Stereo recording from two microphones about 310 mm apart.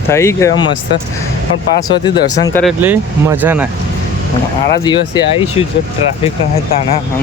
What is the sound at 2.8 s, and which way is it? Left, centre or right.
Speech, centre.